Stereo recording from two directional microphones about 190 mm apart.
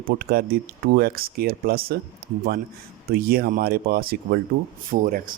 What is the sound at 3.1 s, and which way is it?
Speech, 50° right (ahead or behind).